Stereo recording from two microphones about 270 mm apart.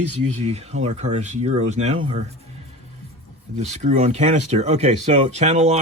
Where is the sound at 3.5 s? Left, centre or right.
Right.